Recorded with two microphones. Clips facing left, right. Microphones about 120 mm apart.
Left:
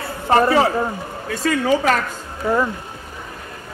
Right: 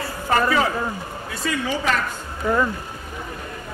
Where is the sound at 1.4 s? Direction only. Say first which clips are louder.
Left 6 dB; 45° left (ahead or behind).